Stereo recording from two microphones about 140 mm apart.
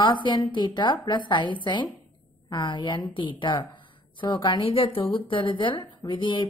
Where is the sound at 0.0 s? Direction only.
35° left (ahead or behind).